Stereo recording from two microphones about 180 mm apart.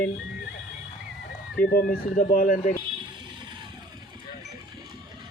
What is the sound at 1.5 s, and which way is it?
Speech, 60° left (ahead or behind).